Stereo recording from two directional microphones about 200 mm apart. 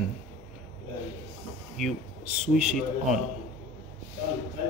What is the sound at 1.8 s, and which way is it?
Speech, centre (ahead or behind).